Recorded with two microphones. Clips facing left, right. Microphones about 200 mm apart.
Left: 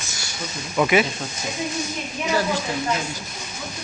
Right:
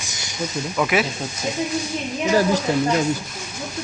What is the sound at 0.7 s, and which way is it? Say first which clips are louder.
Speech: left 3 dB; centre (ahead or behind).